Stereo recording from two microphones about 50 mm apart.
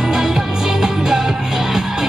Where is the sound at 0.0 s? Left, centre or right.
Centre.